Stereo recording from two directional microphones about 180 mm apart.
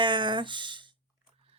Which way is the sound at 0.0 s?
25° right (ahead or behind).